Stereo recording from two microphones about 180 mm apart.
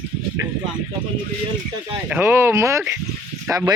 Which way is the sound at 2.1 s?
15° right (ahead or behind).